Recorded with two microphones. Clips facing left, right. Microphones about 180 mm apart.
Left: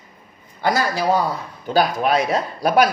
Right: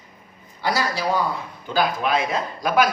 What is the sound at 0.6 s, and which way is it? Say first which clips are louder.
A man's voice: left 4 dB; 50° left (ahead or behind).